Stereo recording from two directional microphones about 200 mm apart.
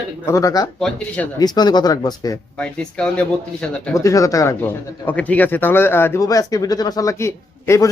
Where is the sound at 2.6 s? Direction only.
5° left (ahead or behind).